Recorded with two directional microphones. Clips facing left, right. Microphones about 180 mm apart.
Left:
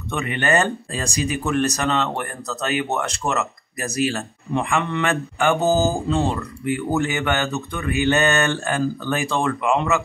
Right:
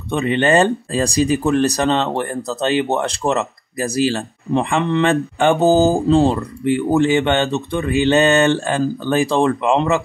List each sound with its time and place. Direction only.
0.1 s speech: 30° right (ahead or behind)